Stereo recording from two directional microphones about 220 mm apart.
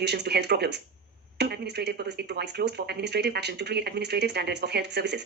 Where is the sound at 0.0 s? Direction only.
50° right (ahead or behind).